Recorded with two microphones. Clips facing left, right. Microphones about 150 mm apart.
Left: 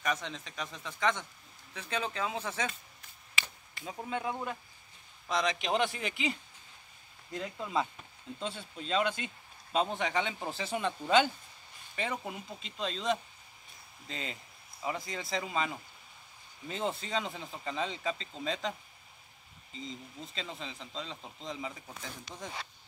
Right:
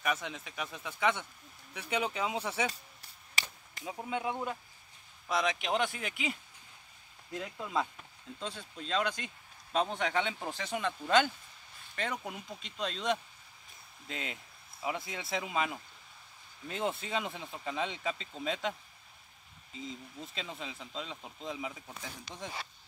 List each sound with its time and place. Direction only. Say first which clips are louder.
0.0 s speech: even; 5° right (ahead or behind)
3.0 s a sound: left 1 dB; 35° right (ahead or behind)
3.8 s speech: even; 10° right (ahead or behind)